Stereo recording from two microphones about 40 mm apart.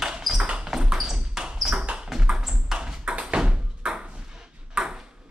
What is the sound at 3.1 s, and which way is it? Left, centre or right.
Bouncing, right.